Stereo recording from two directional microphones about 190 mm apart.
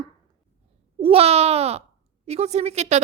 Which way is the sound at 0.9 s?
30° right (ahead or behind).